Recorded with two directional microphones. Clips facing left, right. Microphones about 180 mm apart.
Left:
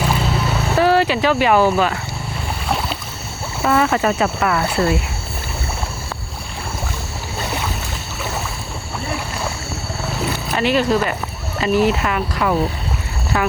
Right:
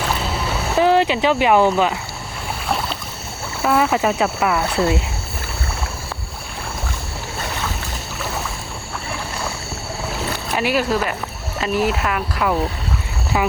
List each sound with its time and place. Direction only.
0.8 s speech: 20° right (ahead or behind)
2.6 s rowboat: centre (ahead or behind)
3.6 s speech: 5° right (ahead or behind)
10.5 s speech: 5° right (ahead or behind)
13.3 s speech: 10° right (ahead or behind)